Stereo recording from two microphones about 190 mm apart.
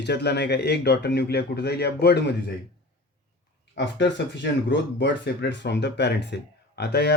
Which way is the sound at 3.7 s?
70° left (ahead or behind).